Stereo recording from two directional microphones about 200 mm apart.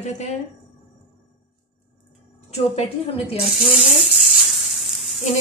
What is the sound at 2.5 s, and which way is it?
Speech, 30° left (ahead or behind).